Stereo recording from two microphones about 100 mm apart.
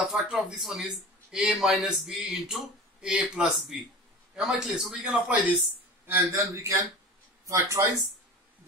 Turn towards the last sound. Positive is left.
turn(degrees=-30)  # may be behind; listen again after turning